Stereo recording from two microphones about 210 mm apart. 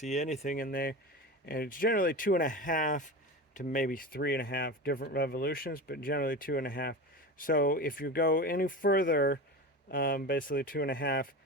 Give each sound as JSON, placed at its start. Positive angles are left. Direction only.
{"t": 0.0, "sound": "speech", "side_deg": 35}